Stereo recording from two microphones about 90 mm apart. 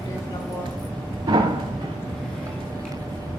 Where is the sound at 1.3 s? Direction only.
55° right (ahead or behind).